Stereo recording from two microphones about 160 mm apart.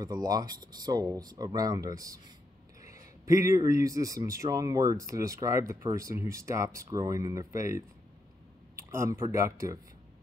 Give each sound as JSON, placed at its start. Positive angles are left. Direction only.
{"t": 0.0, "sound": "a man's voice", "side_deg": -25}
{"t": 8.7, "sound": "a sound", "side_deg": -15}
{"t": 9.2, "sound": "a man's voice", "side_deg": -20}